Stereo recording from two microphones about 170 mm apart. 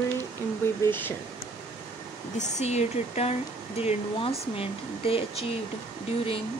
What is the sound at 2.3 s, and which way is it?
Speech, 40° left (ahead or behind).